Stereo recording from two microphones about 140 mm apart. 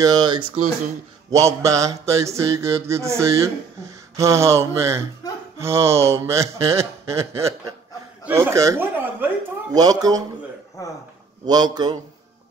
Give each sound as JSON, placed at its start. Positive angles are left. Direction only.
{"t": 0.0, "sound": "speech", "side_deg": -30}
{"t": 1.3, "sound": "mantra", "side_deg": -20}
{"t": 11.4, "sound": "mantra", "side_deg": -30}